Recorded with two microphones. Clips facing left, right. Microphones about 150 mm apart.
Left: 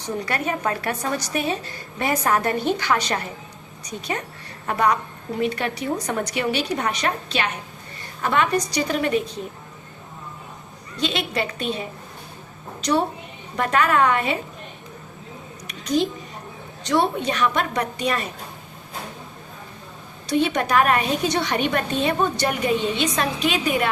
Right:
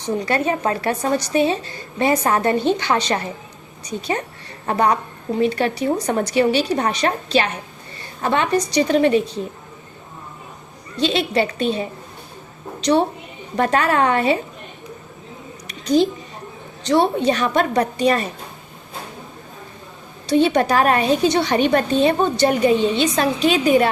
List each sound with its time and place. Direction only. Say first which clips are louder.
0.3 s a woman's voice: right 5 dB; 25° right (ahead or behind)
4.6 s a woman's voice: right 3 dB; 30° right (ahead or behind)
11.0 s a woman's voice: right 6 dB; 30° right (ahead or behind)
12.8 s a woman's voice: right 4 dB; 30° right (ahead or behind)
15.6 s a sound: right 5 dB; 35° right (ahead or behind)
16.8 s a woman's voice: right 5 dB; 30° right (ahead or behind)
20.2 s a woman's voice: right 5 dB; 30° right (ahead or behind)